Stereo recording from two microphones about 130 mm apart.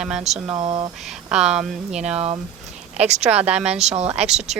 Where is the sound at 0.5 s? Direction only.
40° right (ahead or behind).